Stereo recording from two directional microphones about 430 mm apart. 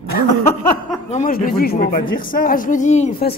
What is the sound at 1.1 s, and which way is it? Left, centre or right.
Speech, centre.